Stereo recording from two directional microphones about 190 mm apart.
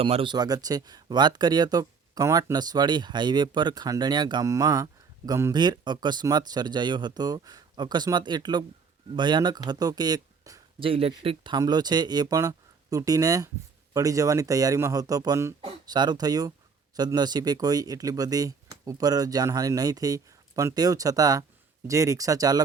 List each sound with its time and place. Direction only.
0.0 s speech: 30° right (ahead or behind)
10.8 s speech: 30° right (ahead or behind)